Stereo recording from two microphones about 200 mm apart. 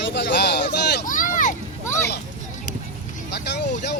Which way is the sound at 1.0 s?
40° left (ahead or behind).